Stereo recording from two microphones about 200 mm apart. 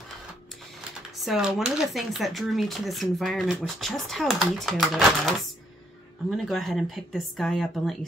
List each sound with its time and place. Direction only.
1.1 s speech: centre (ahead or behind)
6.3 s speech: centre (ahead or behind)